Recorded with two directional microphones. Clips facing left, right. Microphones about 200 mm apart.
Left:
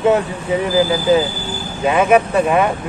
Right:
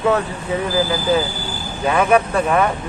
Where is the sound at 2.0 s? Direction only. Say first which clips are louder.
Left 3 dB; 15° left (ahead or behind).